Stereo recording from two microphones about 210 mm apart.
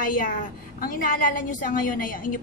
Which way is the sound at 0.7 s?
40° left (ahead or behind).